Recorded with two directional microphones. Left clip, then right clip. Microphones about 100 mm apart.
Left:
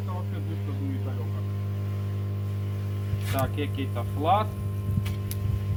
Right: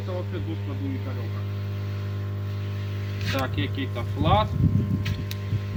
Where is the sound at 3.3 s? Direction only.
25° left (ahead or behind).